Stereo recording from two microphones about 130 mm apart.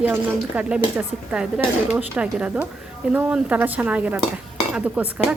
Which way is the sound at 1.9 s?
10° right (ahead or behind).